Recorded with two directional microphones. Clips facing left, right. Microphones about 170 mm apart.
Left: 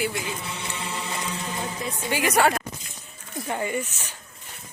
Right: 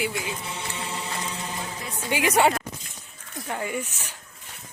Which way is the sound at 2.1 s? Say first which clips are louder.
Right 1 dB; 20° right (ahead or behind).